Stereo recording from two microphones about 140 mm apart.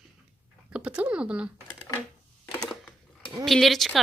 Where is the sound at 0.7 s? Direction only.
10° right (ahead or behind).